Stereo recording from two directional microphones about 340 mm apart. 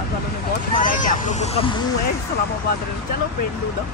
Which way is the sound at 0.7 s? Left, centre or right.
Left.